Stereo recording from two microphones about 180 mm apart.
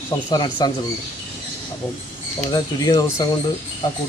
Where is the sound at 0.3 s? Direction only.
25° left (ahead or behind).